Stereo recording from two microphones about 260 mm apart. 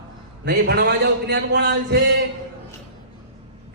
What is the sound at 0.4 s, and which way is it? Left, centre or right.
Speech, right.